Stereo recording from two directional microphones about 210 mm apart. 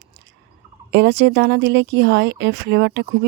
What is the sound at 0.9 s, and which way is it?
Speech, 55° right (ahead or behind).